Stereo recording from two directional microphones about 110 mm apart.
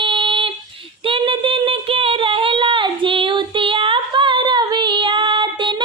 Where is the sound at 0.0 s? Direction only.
50° right (ahead or behind).